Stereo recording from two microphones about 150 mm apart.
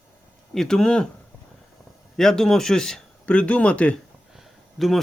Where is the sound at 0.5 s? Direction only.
5° left (ahead or behind).